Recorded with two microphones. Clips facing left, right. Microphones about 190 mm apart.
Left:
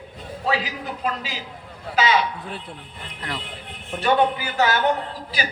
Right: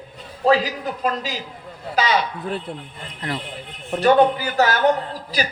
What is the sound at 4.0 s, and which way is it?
Speech, 40° right (ahead or behind).